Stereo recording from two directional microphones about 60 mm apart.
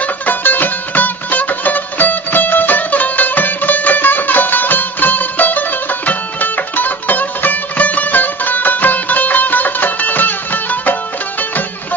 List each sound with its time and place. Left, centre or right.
0.0 s music: left